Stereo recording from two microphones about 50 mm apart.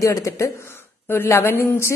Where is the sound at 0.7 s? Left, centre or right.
Left.